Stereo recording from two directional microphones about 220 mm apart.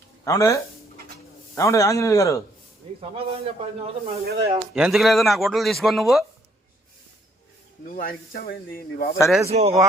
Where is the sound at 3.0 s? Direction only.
25° right (ahead or behind).